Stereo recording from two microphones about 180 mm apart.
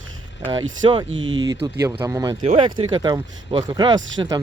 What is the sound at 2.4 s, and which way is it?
Speech, 30° right (ahead or behind).